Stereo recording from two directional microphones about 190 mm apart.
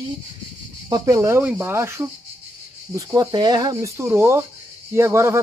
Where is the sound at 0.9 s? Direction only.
20° right (ahead or behind).